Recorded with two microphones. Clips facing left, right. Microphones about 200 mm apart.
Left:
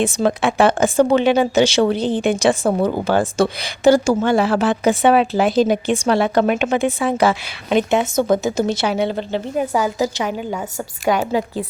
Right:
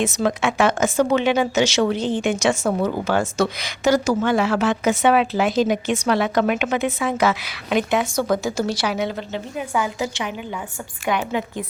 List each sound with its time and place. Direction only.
0.0 s a woman's voice: 30° left (ahead or behind)